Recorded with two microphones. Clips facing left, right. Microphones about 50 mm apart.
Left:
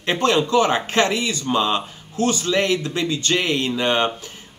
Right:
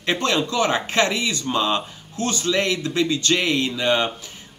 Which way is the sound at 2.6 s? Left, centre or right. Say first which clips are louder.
Left 1 dB; centre.